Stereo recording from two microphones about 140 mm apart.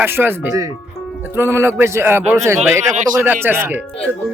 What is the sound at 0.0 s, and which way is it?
A man's voice, 15° right (ahead or behind).